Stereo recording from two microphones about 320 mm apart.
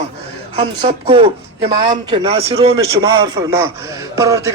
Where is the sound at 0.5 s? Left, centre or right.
Centre.